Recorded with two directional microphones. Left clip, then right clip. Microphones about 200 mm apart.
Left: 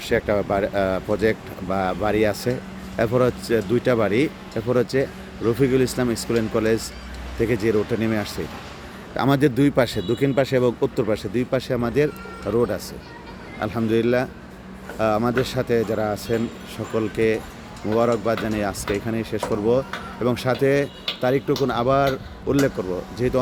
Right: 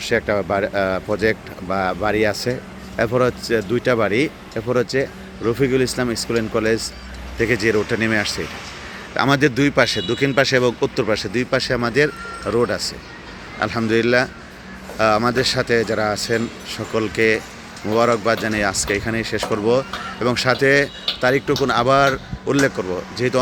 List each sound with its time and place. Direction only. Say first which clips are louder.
0.0 s speech: right 2 dB; 5° left (ahead or behind)